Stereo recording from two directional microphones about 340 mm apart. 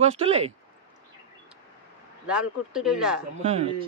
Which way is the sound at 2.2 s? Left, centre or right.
Centre.